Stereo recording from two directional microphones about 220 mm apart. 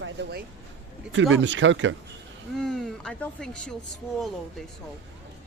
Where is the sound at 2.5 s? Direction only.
Centre (ahead or behind).